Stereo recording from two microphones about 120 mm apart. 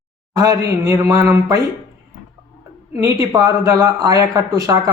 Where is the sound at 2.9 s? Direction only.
25° right (ahead or behind).